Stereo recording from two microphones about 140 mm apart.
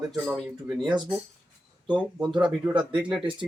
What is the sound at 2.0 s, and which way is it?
Speech, 10° right (ahead or behind).